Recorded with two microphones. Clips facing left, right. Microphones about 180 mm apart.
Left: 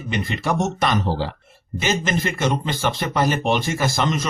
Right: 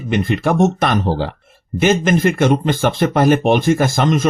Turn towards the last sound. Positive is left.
turn(degrees=-50)  # may be behind; listen again after turning